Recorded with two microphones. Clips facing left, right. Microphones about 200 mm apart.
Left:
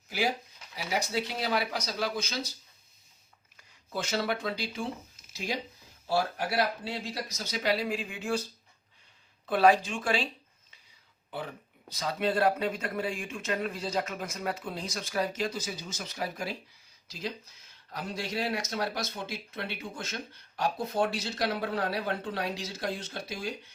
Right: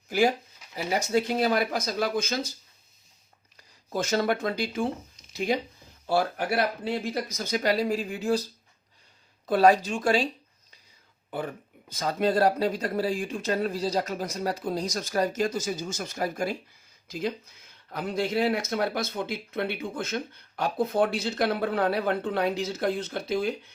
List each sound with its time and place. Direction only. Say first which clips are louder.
0.1 s speech: right 7 dB; 50° right (ahead or behind)
3.6 s speech: right 6 dB; 40° right (ahead or behind)
9.5 s speech: right 3 dB; 40° right (ahead or behind)
11.3 s speech: right 5 dB; 50° right (ahead or behind)